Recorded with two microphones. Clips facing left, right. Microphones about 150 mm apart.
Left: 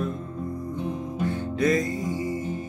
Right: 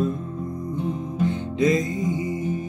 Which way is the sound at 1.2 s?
20° right (ahead or behind).